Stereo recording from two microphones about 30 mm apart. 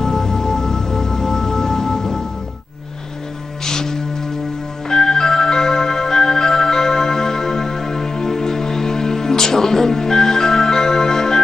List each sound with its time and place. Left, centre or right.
0.0 s music: centre
3.6 s music: centre